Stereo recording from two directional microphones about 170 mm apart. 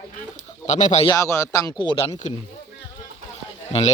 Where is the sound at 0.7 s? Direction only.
45° left (ahead or behind).